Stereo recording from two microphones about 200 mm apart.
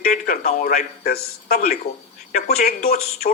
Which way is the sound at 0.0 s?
40° left (ahead or behind).